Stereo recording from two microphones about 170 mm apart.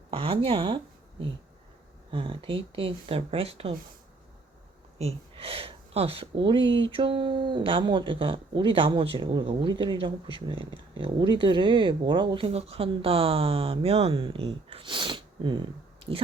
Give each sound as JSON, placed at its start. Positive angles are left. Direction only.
{"t": 0.1, "sound": "speech", "side_deg": -35}
{"t": 2.0, "sound": "speech", "side_deg": -30}
{"t": 4.9, "sound": "speech", "side_deg": -35}